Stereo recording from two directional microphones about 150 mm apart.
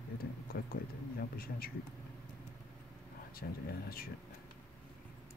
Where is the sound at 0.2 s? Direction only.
85° left.